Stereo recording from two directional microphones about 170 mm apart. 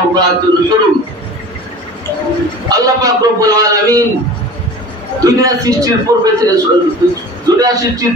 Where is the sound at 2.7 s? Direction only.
20° right (ahead or behind).